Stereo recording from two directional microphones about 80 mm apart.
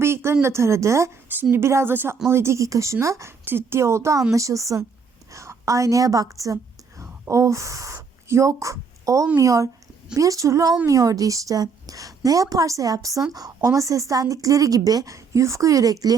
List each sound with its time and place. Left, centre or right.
0.0 s a sound: right
0.4 s speech: right
1.3 s a woman's voice: right